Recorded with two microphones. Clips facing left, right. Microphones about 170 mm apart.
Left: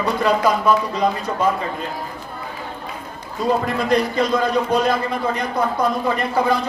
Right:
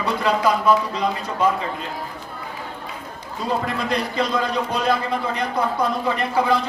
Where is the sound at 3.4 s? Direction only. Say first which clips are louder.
Left 4 dB; 45° left (ahead or behind).